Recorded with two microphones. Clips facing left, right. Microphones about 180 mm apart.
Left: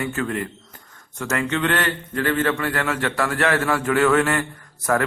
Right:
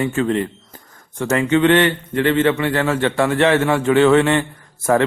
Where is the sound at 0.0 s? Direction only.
25° right (ahead or behind).